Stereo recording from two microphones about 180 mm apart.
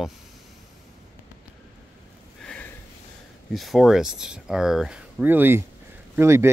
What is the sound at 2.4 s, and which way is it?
Sniff, 10° left (ahead or behind).